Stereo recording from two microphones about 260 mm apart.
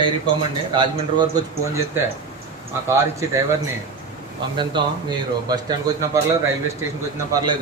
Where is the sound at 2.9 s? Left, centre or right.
Centre.